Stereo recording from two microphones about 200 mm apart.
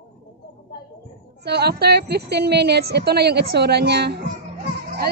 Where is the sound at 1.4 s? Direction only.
55° right (ahead or behind).